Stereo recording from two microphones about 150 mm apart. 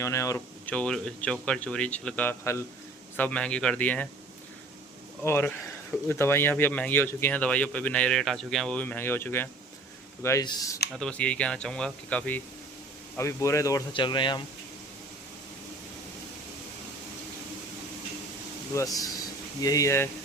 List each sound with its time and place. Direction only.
0.0 s speech: 20° left (ahead or behind)
5.2 s speech: 15° left (ahead or behind)
10.2 s speech: 25° left (ahead or behind)
10.9 s speech: 5° left (ahead or behind)
13.1 s speech: 20° left (ahead or behind)
13.9 s speech: 30° left (ahead or behind)
18.7 s speech: 20° left (ahead or behind)